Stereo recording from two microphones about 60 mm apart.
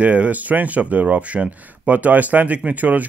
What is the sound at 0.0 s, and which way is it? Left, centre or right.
Speech, right.